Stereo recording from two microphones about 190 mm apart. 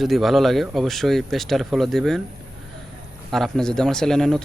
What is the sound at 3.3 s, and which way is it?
Speech, centre (ahead or behind).